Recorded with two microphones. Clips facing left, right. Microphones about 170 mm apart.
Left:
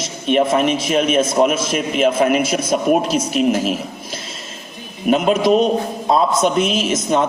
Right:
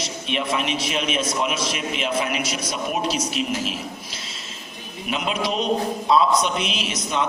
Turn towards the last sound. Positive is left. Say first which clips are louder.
# left 8 dB
turn(degrees=45)  # may be behind; listen again after turning